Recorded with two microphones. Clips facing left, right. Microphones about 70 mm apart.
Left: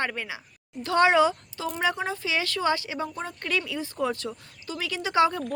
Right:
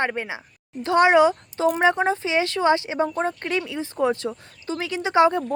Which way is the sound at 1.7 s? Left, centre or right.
Right.